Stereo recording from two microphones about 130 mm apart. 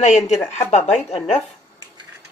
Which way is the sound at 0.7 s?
60° left (ahead or behind).